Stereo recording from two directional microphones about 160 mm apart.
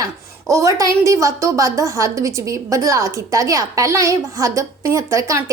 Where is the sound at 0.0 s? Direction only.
20° right (ahead or behind).